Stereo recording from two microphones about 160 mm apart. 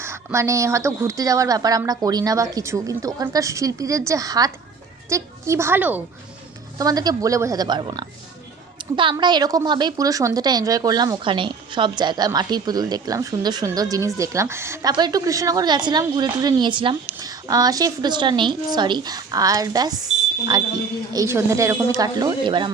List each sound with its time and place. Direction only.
0.0 s a woman's voice: 15° right (ahead or behind)
6.7 s a woman's voice: 25° right (ahead or behind)